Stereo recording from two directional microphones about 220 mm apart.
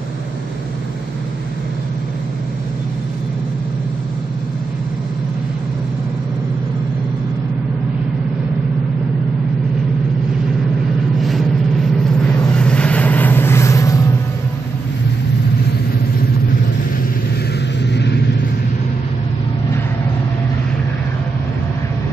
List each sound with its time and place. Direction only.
11.1 s vehicle: centre (ahead or behind)
17.8 s vehicle: 50° left (ahead or behind)